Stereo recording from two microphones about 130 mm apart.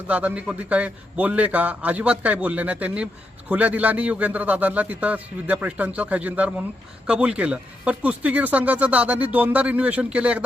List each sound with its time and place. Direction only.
0.1 s speech: 10° right (ahead or behind)